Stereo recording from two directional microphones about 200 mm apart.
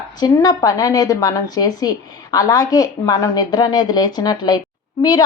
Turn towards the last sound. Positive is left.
turn(degrees=20)  # may be behind; listen again after turning